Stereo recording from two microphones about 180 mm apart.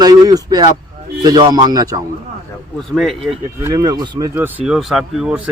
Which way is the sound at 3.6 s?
20° right (ahead or behind).